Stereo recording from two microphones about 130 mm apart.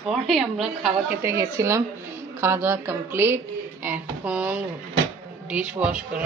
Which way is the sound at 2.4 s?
20° right (ahead or behind).